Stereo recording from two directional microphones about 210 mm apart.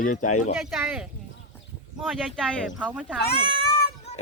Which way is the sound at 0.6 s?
5° right (ahead or behind).